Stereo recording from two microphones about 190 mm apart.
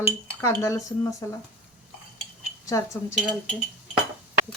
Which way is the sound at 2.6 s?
15° left (ahead or behind).